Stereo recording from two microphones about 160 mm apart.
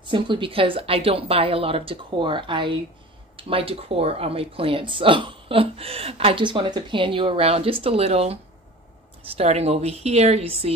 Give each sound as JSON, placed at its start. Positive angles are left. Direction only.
{"t": 0.0, "sound": "speech", "side_deg": -30}
{"t": 9.4, "sound": "speech", "side_deg": -40}